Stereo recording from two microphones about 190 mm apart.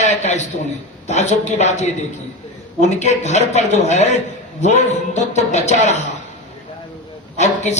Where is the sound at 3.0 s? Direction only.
35° left (ahead or behind).